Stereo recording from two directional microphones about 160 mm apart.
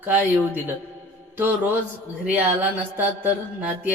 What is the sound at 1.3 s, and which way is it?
Mantra, 15° right (ahead or behind).